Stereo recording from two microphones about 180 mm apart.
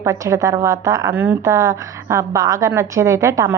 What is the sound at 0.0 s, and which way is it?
A woman's voice, 15° right (ahead or behind).